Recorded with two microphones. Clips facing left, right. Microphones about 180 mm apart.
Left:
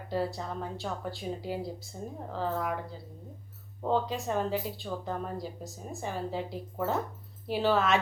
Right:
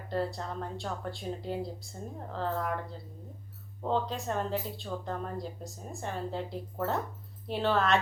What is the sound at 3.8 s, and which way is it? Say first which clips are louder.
Speech: left 2 dB; 5° left (ahead or behind).